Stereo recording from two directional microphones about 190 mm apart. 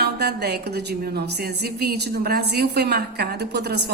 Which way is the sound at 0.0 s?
60° right (ahead or behind).